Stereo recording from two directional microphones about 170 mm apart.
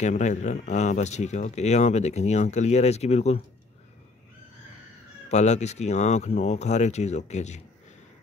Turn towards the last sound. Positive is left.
turn(degrees=40)  # may be behind; listen again after turning